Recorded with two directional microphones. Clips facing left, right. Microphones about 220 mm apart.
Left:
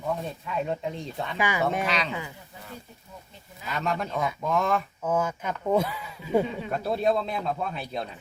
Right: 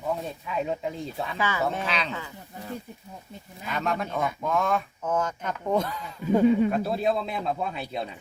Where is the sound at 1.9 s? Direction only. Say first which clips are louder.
Left 1 dB; centre (ahead or behind).